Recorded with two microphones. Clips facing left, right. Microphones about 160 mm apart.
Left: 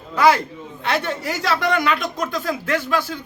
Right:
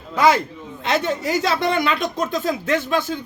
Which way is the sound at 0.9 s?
20° right (ahead or behind).